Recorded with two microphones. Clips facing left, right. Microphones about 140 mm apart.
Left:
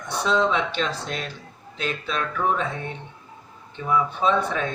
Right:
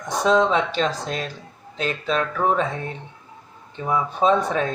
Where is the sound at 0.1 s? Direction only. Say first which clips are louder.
Right 4 dB; 40° right (ahead or behind).